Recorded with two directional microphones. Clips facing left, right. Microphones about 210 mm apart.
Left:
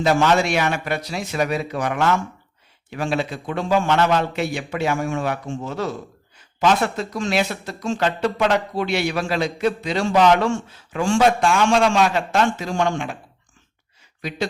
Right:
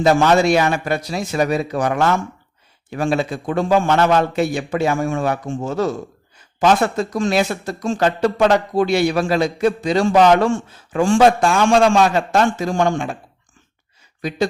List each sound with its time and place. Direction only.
0.0 s a man's voice: 40° right (ahead or behind)